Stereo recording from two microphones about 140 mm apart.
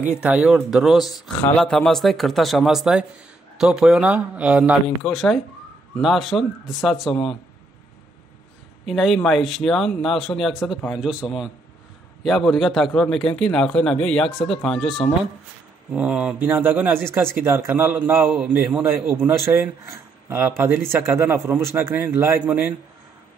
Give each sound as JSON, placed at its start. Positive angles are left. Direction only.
{"t": 0.2, "sound": "a man's voice", "side_deg": -5}
{"t": 4.8, "sound": "a man's voice", "side_deg": 0}
{"t": 8.8, "sound": "a man's voice", "side_deg": 0}
{"t": 15.9, "sound": "speech", "side_deg": -10}